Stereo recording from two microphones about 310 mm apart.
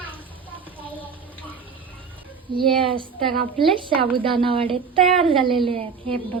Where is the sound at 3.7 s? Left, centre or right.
Centre.